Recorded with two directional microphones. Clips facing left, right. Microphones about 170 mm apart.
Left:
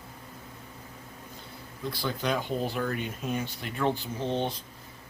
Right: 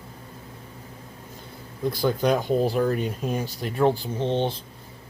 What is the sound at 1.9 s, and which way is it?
Speech, 45° right (ahead or behind).